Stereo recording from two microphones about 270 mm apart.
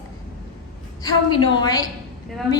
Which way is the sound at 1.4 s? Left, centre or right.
Centre.